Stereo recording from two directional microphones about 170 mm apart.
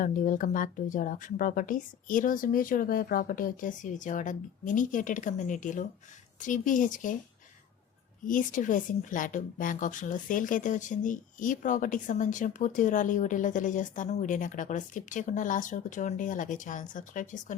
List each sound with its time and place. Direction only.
0.0 s a woman's voice: 50° left (ahead or behind)
8.3 s a woman's voice: 50° left (ahead or behind)